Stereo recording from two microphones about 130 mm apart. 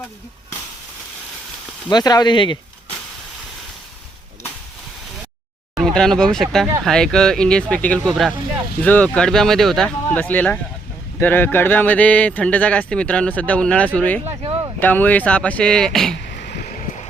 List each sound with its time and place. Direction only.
1.9 s speech: 30° left (ahead or behind)
5.7 s speech: 5° left (ahead or behind)